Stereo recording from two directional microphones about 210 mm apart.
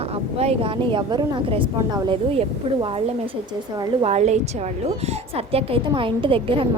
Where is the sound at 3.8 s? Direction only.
25° right (ahead or behind).